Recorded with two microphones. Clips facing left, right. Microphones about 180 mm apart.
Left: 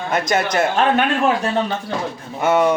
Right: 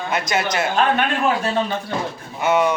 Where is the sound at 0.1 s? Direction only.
50° left (ahead or behind).